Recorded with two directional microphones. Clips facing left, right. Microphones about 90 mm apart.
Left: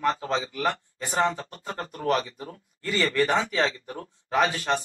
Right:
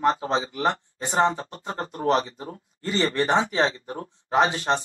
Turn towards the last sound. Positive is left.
turn(degrees=-25)  # may be behind; listen again after turning